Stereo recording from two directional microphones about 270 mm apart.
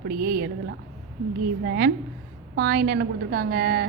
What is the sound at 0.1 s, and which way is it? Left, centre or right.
Speech, right.